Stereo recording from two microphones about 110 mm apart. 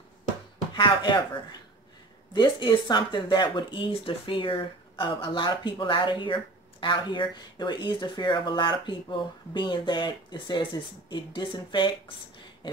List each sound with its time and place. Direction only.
0.7 s speech: 45° left (ahead or behind)